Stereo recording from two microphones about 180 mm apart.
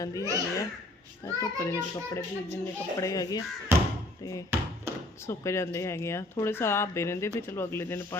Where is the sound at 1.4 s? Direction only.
15° left (ahead or behind).